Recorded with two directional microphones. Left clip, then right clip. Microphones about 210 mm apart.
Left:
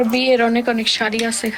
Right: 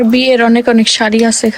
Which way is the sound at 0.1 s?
45° right (ahead or behind).